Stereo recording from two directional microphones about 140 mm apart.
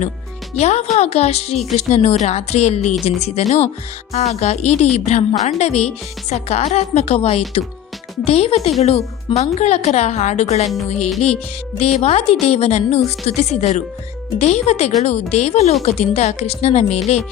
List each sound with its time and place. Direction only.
0.5 s speech: 50° left (ahead or behind)
11.8 s speech: 50° left (ahead or behind)